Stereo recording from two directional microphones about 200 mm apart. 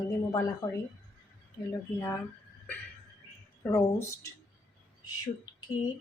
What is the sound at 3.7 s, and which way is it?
Speech, 15° left (ahead or behind).